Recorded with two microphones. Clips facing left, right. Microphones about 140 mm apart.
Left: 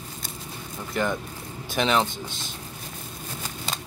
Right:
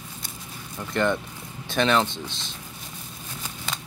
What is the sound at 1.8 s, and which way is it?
Speech, 10° left (ahead or behind).